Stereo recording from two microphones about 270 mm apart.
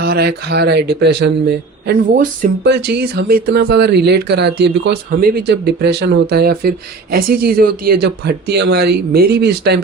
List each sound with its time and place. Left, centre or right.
0.0 s speech: right